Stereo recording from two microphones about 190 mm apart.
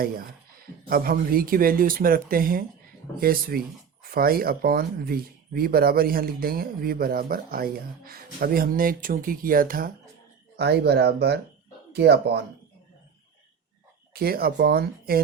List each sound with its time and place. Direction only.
0.9 s speech: 50° right (ahead or behind)
10.6 s speech: 60° right (ahead or behind)
14.1 s speech: 55° right (ahead or behind)